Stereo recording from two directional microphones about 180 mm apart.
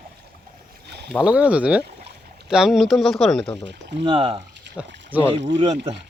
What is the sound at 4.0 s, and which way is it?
Speech, 30° right (ahead or behind).